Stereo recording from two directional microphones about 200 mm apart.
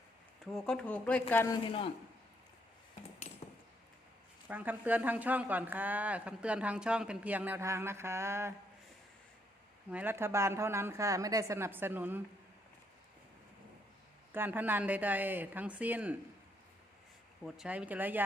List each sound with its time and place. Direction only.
0.5 s speech: 5° left (ahead or behind)
1.6 s a man's voice: 25° left (ahead or behind)
4.4 s speech: 10° right (ahead or behind)
9.9 s speech: 10° right (ahead or behind)
14.3 s speech: 10° right (ahead or behind)
17.4 s speech: 5° right (ahead or behind)